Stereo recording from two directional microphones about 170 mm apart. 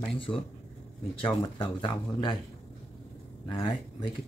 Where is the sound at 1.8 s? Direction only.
25° left (ahead or behind).